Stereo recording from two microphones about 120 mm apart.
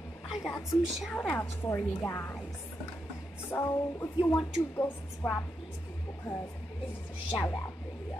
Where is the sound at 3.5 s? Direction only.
25° left (ahead or behind).